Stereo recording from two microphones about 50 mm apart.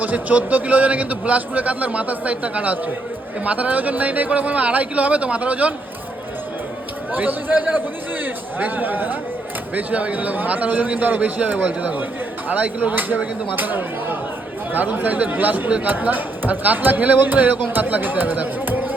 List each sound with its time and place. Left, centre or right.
0.0 s a man's voice: right
7.1 s speech: right